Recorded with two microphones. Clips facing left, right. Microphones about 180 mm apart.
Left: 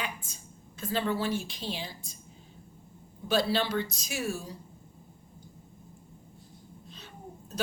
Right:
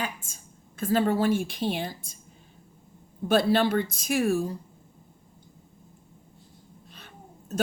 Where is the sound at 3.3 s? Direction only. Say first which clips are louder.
Right 6 dB; 55° right (ahead or behind).